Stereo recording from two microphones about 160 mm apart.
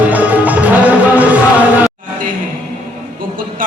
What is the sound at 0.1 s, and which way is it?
Music, 10° right (ahead or behind).